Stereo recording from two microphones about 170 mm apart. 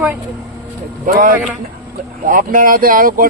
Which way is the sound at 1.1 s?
50° right (ahead or behind).